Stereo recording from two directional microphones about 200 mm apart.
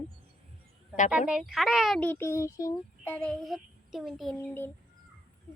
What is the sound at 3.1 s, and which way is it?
A child's voice, centre (ahead or behind).